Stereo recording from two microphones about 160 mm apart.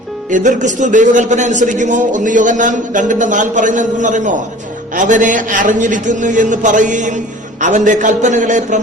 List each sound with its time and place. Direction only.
0.3 s a man's voice: 50° right (ahead or behind)